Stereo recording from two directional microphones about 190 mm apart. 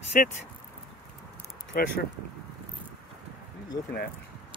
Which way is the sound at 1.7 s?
50° left (ahead or behind).